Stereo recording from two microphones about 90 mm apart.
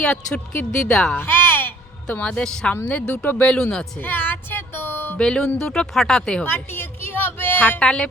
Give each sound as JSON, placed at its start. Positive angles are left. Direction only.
{"t": 0.0, "sound": "speech", "side_deg": 10}
{"t": 1.2, "sound": "a sound", "side_deg": 25}
{"t": 2.8, "sound": "speech", "side_deg": 10}
{"t": 4.0, "sound": "child singing", "side_deg": 20}
{"t": 5.1, "sound": "speech", "side_deg": 10}
{"t": 6.4, "sound": "a sound", "side_deg": 25}